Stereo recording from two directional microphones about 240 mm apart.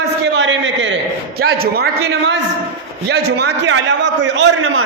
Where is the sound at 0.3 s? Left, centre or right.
Right.